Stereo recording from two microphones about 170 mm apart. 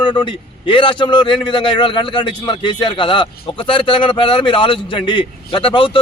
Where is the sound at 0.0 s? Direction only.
30° left (ahead or behind).